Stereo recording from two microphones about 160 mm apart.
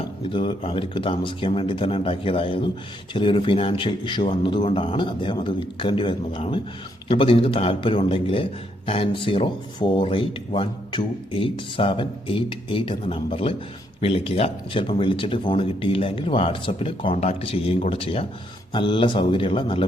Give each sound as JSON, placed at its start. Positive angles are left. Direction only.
{"t": 0.3, "sound": "speech", "side_deg": 30}